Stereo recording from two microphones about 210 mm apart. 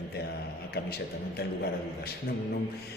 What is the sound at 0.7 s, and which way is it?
A man's voice, 50° left (ahead or behind).